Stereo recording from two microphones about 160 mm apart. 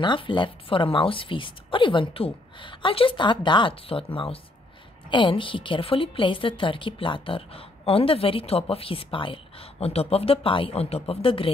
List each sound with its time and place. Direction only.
0.0 s a woman's voice: 30° left (ahead or behind)